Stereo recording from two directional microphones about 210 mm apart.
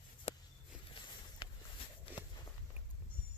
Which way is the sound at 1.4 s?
20° left (ahead or behind).